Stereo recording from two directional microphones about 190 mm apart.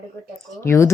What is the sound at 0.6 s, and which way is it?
Speech, 15° left (ahead or behind).